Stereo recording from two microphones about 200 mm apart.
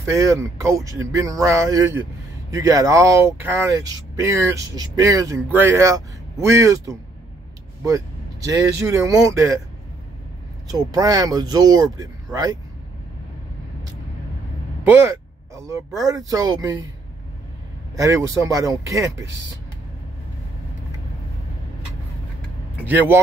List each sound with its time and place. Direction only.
0.0 s speech: 15° right (ahead or behind)
8.5 s speech: 15° right (ahead or behind)
10.7 s speech: 20° right (ahead or behind)
14.8 s speech: 10° right (ahead or behind)
17.9 s speech: 15° right (ahead or behind)
22.8 s speech: 10° right (ahead or behind)